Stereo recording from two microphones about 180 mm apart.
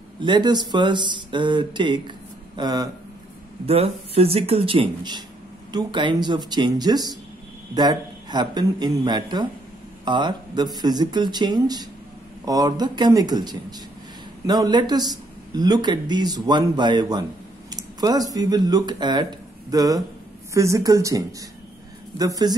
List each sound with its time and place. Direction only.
0.2 s speech: 25° right (ahead or behind)
3.6 s speech: 35° right (ahead or behind)